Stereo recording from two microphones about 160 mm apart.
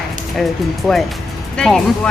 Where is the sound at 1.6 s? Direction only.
5° left (ahead or behind).